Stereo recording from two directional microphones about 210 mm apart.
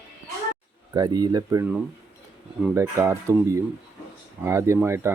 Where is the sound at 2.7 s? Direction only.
15° right (ahead or behind).